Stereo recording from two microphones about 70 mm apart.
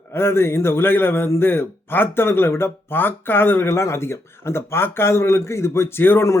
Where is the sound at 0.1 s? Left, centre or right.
Left.